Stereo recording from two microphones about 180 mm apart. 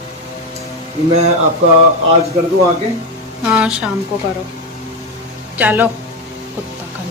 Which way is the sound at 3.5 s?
Centre (ahead or behind).